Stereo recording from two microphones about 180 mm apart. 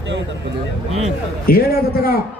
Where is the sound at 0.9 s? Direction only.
35° right (ahead or behind).